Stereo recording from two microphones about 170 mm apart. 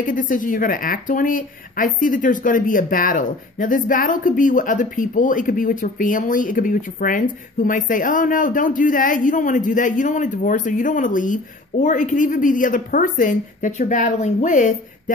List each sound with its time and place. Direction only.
0.0 s speech: 50° left (ahead or behind)